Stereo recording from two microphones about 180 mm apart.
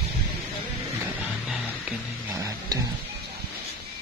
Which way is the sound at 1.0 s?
10° right (ahead or behind).